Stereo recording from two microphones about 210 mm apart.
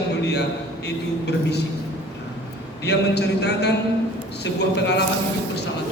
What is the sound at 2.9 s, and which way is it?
A man's voice, 55° left (ahead or behind).